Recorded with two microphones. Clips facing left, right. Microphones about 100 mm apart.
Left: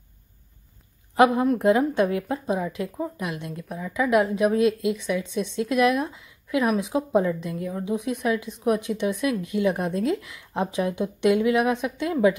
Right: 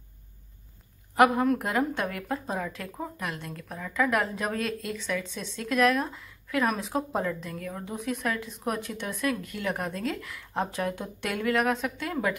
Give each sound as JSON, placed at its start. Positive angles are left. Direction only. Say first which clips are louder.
{"t": 1.1, "sound": "a woman's voice", "louder": "left 3 dB", "side_deg": 20}